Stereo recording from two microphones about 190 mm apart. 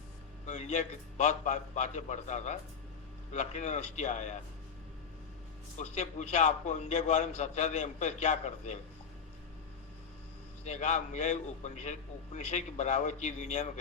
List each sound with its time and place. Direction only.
0.4 s a man's voice: 40° left (ahead or behind)
5.7 s a man's voice: 35° left (ahead or behind)
10.6 s a man's voice: 40° left (ahead or behind)